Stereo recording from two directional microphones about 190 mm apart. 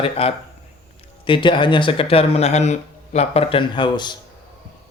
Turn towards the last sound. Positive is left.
turn(degrees=25)  # may be behind; listen again after turning